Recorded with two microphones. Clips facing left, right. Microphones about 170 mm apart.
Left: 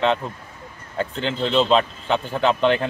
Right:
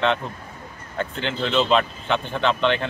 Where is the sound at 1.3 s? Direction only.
35° left (ahead or behind).